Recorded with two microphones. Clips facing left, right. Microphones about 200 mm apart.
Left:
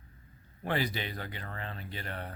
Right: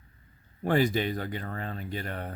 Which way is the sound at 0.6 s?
45° right (ahead or behind).